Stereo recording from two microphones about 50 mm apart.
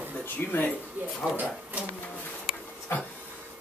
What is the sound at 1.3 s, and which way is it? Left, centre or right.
Speech, right.